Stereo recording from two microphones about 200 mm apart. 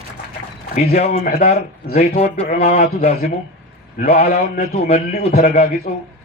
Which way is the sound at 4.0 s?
30° left (ahead or behind).